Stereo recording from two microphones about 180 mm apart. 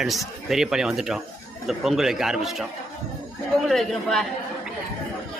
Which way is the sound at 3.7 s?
Centre (ahead or behind).